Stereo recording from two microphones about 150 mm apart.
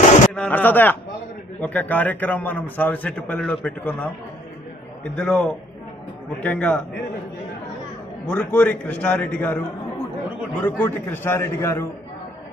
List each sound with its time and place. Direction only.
0.3 s a man's voice: 10° left (ahead or behind)
8.3 s a man's voice: 10° left (ahead or behind)